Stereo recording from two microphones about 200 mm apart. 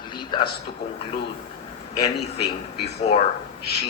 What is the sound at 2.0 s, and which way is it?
Speech, 55° left (ahead or behind).